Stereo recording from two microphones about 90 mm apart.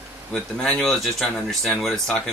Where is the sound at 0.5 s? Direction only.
5° left (ahead or behind).